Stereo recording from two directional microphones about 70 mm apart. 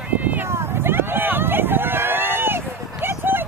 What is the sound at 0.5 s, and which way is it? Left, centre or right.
Vehicle, right.